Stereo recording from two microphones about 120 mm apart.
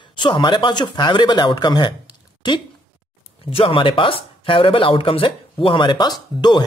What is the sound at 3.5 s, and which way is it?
Speech, 45° left (ahead or behind).